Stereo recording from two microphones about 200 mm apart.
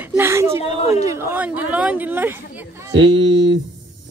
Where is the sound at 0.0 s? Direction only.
10° right (ahead or behind).